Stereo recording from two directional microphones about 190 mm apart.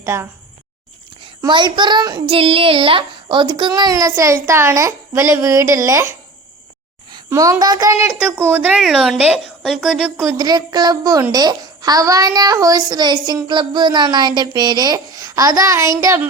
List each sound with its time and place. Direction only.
0.0 s a woman's voice: 15° right (ahead or behind)
1.2 s a woman's voice: 25° right (ahead or behind)
7.3 s a woman's voice: 15° right (ahead or behind)
10.2 s a woman's voice: 20° right (ahead or behind)